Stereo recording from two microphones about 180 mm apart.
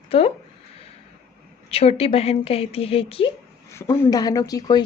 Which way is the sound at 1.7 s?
35° left (ahead or behind).